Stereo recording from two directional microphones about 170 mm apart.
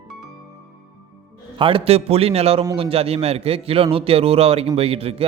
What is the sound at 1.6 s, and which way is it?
A man's voice, 35° right (ahead or behind).